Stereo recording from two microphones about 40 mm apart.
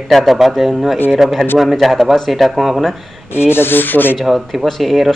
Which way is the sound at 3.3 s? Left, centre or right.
Left.